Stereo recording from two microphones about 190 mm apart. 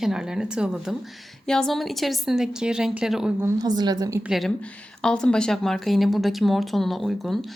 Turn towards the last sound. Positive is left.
turn(degrees=0)  # may be behind; listen again after turning